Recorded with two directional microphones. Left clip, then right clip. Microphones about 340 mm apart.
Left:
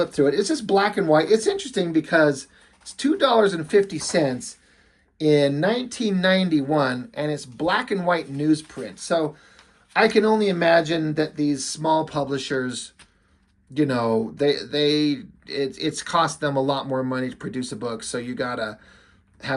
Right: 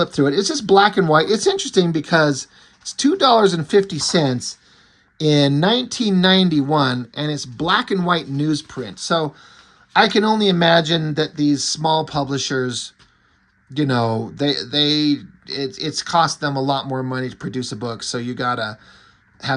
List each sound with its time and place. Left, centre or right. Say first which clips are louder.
0.1 s speech: right 2 dB; right